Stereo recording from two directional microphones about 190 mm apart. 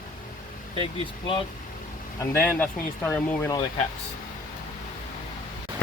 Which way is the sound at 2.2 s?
10° left (ahead or behind).